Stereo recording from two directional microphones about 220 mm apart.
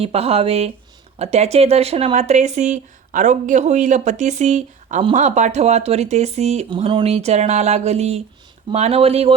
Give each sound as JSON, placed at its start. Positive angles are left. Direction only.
{"t": 0.0, "sound": "speech", "side_deg": -25}